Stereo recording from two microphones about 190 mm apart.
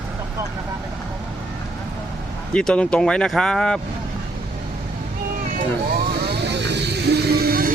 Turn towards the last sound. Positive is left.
turn(degrees=-50)  # may be behind; listen again after turning